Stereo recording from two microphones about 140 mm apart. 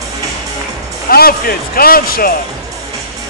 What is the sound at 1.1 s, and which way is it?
Speech, 90° left.